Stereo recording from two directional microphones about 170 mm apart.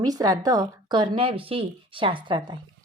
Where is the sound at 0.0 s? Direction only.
20° right (ahead or behind).